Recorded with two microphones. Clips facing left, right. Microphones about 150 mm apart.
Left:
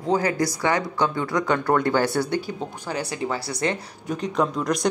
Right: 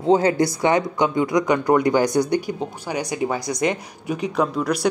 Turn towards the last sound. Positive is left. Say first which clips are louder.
# right 2 dB
turn(degrees=-5)  # may be behind; listen again after turning